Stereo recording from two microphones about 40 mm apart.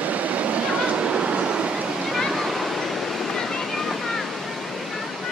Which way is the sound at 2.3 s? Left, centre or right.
Centre.